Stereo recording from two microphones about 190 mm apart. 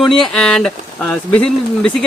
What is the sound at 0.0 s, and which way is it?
Speech, centre (ahead or behind).